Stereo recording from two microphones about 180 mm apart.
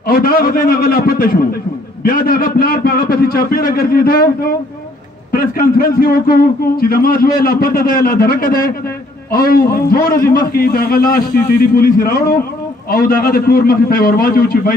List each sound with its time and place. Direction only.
0.0 s a man's voice: 55° left (ahead or behind)